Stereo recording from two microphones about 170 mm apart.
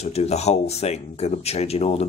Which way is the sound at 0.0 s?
40° left (ahead or behind).